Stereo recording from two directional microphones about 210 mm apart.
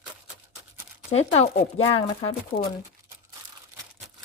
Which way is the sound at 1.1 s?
30° left (ahead or behind).